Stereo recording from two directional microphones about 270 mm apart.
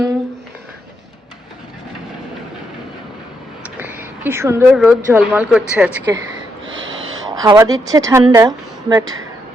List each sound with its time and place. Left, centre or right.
3.8 s a woman's voice: centre
6.7 s a sound: right
7.4 s speech: centre